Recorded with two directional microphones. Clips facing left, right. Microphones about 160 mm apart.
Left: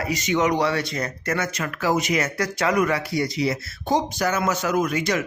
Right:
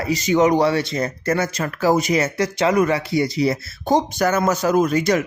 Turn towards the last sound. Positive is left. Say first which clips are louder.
# right 5 dB
turn(degrees=-40)  # may be behind; listen again after turning